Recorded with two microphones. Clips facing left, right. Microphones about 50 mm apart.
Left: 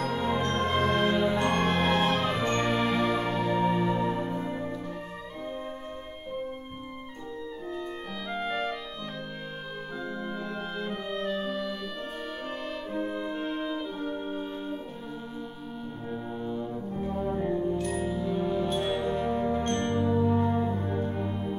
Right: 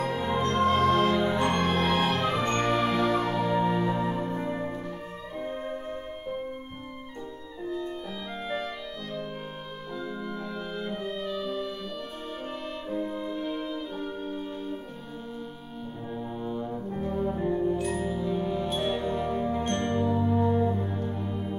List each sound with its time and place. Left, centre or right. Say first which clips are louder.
0.0 s music: even; centre
0.5 s music: right 7 dB; centre
1.1 s music: even; centre
4.5 s music: right 1 dB; centre
8.4 s music: left 2 dB; centre
13.0 s music: even; left
13.6 s music: left 1 dB; left
16.4 s brass instrument: right 1 dB; centre
17.6 s music: right 2 dB; centre
17.9 s music: even; centre
19.9 s music: left 1 dB; centre
21.0 s music: left 1 dB; centre